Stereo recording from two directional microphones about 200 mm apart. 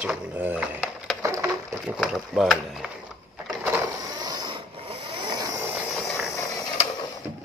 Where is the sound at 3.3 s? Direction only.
10° right (ahead or behind).